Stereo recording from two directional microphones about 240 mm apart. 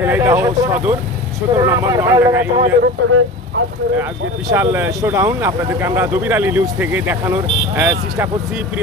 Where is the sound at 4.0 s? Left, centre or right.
Centre.